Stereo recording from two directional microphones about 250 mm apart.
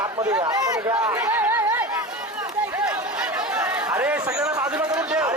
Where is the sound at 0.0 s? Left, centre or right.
Centre.